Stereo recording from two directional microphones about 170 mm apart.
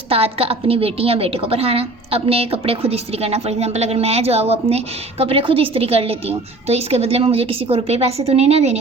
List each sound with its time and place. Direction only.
0.1 s a woman's voice: 35° right (ahead or behind)